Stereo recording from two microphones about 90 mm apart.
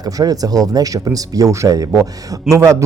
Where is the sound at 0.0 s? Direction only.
45° right (ahead or behind).